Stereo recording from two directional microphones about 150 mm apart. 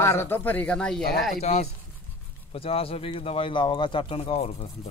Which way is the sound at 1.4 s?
45° left (ahead or behind).